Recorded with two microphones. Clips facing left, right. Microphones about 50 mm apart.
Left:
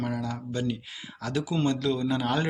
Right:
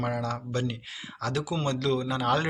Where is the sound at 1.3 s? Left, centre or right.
Left.